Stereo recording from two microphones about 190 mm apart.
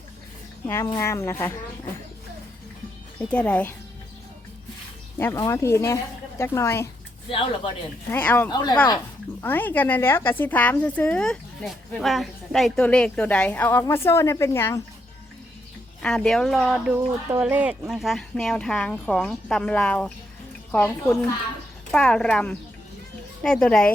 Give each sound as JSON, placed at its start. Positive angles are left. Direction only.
{"t": 0.6, "sound": "a woman's voice", "side_deg": 15}
{"t": 3.2, "sound": "a woman's voice", "side_deg": 5}
{"t": 5.1, "sound": "a woman's voice", "side_deg": 15}
{"t": 7.3, "sound": "speech", "side_deg": 30}
{"t": 8.1, "sound": "a woman's voice", "side_deg": 10}
{"t": 8.4, "sound": "speech", "side_deg": 20}
{"t": 9.4, "sound": "a woman's voice", "side_deg": 10}
{"t": 16.0, "sound": "a woman's voice", "side_deg": 5}
{"t": 21.9, "sound": "speech", "side_deg": 5}